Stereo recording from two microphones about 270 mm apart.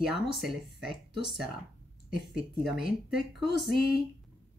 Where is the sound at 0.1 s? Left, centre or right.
Left.